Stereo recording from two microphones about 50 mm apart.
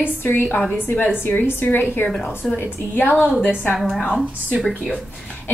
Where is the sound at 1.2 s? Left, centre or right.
Left.